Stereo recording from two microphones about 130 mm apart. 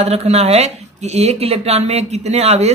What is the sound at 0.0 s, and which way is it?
Speech, 50° right (ahead or behind).